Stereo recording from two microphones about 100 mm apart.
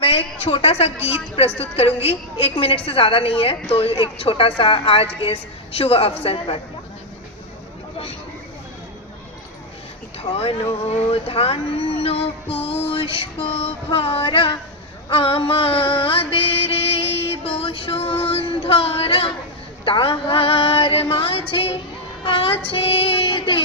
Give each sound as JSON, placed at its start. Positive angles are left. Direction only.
{"t": 0.0, "sound": "a sound", "side_deg": 70}
{"t": 1.0, "sound": "speech", "side_deg": 75}
{"t": 10.2, "sound": "speech", "side_deg": 75}
{"t": 22.2, "sound": "female singing", "side_deg": 65}